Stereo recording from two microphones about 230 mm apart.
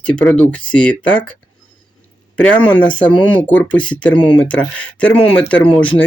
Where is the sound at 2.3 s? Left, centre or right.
Centre.